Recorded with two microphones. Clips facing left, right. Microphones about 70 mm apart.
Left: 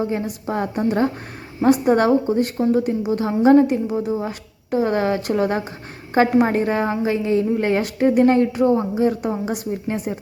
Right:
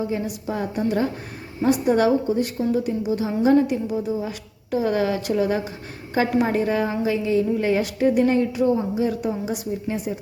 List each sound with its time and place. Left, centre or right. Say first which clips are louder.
0.0 s a woman's voice: left 2 dB; left